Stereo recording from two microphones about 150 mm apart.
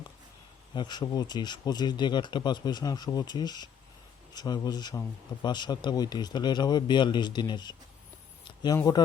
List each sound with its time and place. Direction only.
0.7 s speech: 30° left (ahead or behind)